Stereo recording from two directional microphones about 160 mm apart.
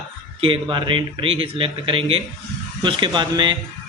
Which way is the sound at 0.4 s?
35° right (ahead or behind).